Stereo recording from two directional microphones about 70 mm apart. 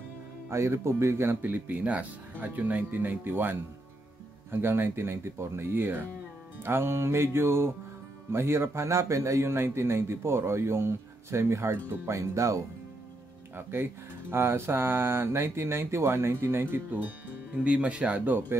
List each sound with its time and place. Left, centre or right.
0.5 s speech: right
13.6 s speech: right
17.6 s speech: centre